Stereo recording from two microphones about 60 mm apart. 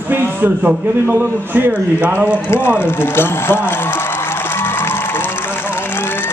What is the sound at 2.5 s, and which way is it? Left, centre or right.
Speech, left.